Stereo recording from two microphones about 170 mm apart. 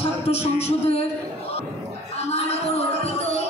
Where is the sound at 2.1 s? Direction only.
40° left (ahead or behind).